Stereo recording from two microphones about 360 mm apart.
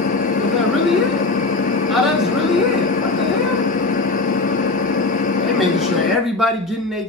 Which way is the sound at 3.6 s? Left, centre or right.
Left.